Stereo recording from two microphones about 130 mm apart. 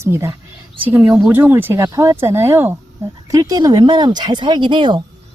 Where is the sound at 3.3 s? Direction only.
30° right (ahead or behind).